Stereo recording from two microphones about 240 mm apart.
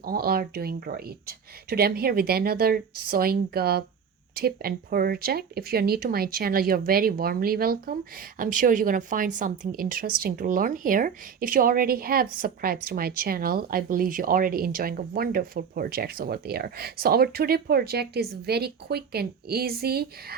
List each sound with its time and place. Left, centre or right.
0.0 s speech: right